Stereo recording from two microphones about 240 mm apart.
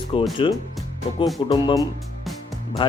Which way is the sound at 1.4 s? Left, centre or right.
Centre.